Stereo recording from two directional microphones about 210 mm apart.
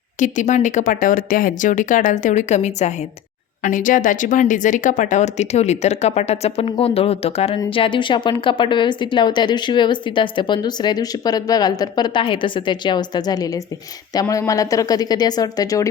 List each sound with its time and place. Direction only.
0.2 s speech: 35° left (ahead or behind); by 15.9 s 15° left (ahead or behind)